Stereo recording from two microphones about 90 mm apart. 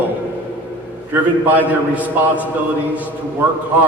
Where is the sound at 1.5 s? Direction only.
15° right (ahead or behind).